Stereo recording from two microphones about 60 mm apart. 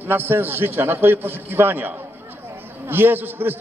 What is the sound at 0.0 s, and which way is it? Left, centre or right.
A man's voice, right.